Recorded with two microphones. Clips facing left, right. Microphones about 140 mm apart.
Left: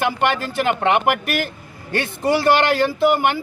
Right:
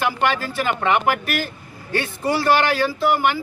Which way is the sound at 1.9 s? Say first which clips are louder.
Left 2 dB; 55° left (ahead or behind).